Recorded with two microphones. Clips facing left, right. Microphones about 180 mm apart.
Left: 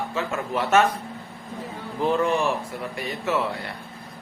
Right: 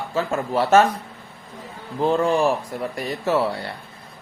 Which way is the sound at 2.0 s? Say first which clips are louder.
Right 3 dB; 30° right (ahead or behind).